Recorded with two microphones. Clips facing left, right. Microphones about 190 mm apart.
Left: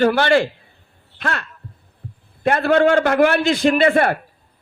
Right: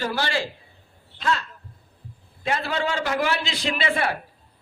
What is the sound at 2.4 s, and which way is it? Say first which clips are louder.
A man's voice: left 11 dB; 55° left (ahead or behind).